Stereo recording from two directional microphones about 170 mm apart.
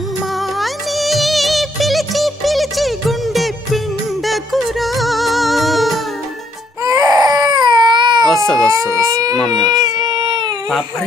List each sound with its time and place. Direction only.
0.3 s music of bollywood: centre (ahead or behind)
4.3 s music: centre (ahead or behind)
6.8 s baby cry: 20° right (ahead or behind)
8.5 s a sound: 20° right (ahead or behind)
9.6 s baby cry: 25° right (ahead or behind)